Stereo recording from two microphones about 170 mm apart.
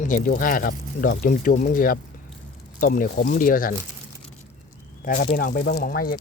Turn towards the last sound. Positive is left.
turn(degrees=60)  # may be behind; listen again after turning